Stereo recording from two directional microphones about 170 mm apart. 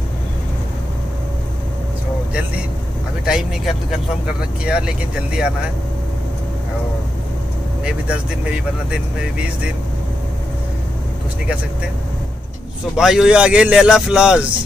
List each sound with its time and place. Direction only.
3.3 s speech: centre (ahead or behind)
7.8 s speech: 5° right (ahead or behind)
12.9 s speech: 5° right (ahead or behind)